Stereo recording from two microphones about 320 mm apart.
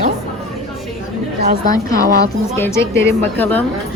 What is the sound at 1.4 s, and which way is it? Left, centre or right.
Speech, right.